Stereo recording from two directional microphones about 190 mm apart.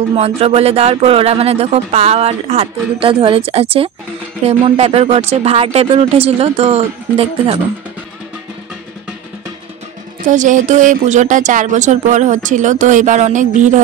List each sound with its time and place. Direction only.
0.1 s speech: 30° right (ahead or behind)
10.2 s speech: 40° right (ahead or behind)